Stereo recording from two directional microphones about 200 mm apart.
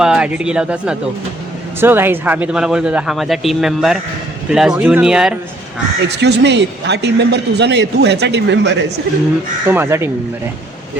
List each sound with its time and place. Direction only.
0.0 s speech: 5° right (ahead or behind)
6.1 s a man's voice: 55° right (ahead or behind)
9.6 s speech: 10° right (ahead or behind)